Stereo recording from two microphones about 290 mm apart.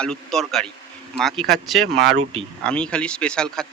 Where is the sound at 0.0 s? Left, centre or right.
Centre.